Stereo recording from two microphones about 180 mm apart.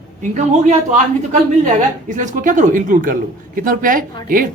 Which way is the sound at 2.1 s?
45° right (ahead or behind).